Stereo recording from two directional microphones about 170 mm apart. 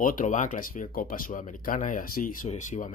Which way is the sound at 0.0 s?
50° left (ahead or behind).